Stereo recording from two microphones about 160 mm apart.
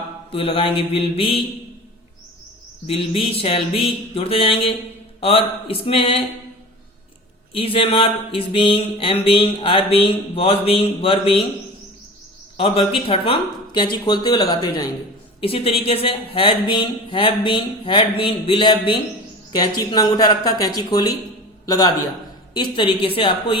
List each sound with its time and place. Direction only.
0.3 s speech: 35° left (ahead or behind)
2.8 s speech: 35° left (ahead or behind)
7.5 s speech: 35° left (ahead or behind)
12.5 s speech: 40° left (ahead or behind)
15.4 s speech: 35° left (ahead or behind)
22.5 s speech: 30° left (ahead or behind)